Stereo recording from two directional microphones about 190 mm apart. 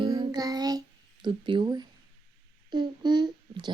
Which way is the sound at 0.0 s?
20° right (ahead or behind).